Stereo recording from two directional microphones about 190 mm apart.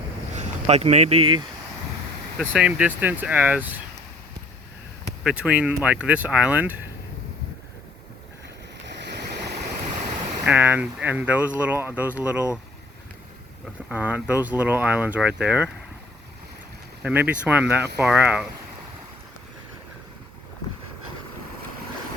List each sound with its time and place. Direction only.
0.3 s speech: 35° right (ahead or behind)
2.5 s speech: 5° right (ahead or behind)
5.2 s speech: 5° right (ahead or behind)
8.9 s waves: 65° right (ahead or behind)
10.4 s speech: 10° right (ahead or behind)
13.9 s speech: 10° right (ahead or behind)
17.0 s speech: 10° right (ahead or behind)